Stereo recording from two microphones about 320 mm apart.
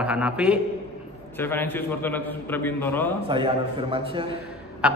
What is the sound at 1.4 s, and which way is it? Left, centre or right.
Mantra, centre.